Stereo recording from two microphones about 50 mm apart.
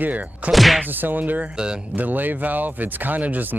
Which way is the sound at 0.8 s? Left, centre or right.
Right.